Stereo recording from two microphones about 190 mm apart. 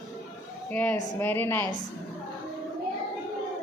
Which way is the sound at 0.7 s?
10° left (ahead or behind).